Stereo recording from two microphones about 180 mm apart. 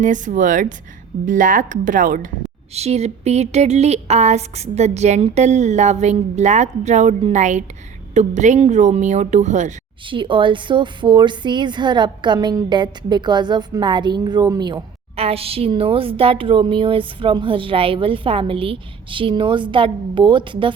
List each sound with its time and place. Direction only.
0.0 s speech: 45° right (ahead or behind)
2.7 s speech: 35° right (ahead or behind)
10.1 s a woman's voice: 30° right (ahead or behind)